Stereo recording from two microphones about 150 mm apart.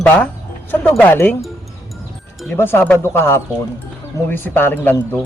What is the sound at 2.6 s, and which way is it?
Speech, 15° left (ahead or behind).